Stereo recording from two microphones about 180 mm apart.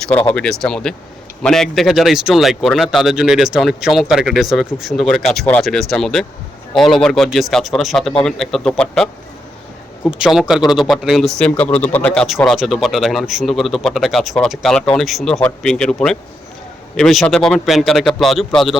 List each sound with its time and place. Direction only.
0.1 s speech: 10° left (ahead or behind)
10.1 s speech: 5° right (ahead or behind)